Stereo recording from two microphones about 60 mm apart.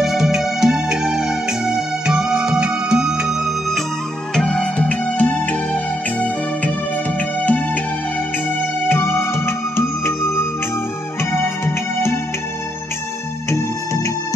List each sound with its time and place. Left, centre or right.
0.0 s music: centre
4.4 s music: centre
4.8 s music: left